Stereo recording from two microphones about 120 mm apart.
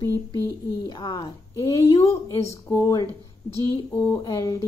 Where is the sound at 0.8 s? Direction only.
35° left (ahead or behind).